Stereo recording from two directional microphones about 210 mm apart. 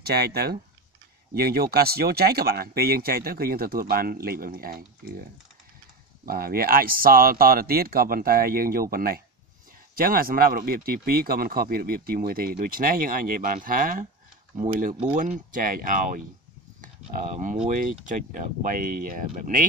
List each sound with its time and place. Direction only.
0.0 s speech: 50° right (ahead or behind)